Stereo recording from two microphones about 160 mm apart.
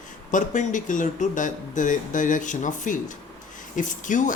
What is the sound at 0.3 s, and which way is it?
Speech, 50° left (ahead or behind).